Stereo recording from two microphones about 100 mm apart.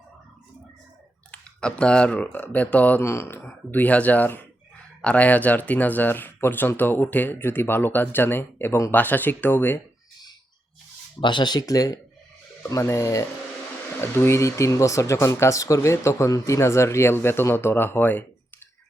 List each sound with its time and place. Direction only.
1.3 s speech: 10° left (ahead or behind)
11.2 s speech: 50° left (ahead or behind); by 18.3 s 20° left (ahead or behind)